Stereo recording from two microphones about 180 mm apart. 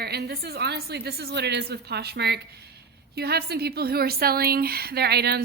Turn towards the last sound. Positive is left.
turn(degrees=-65)  # may be behind; listen again after turning